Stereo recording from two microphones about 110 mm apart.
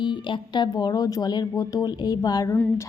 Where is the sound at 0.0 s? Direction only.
45° left (ahead or behind).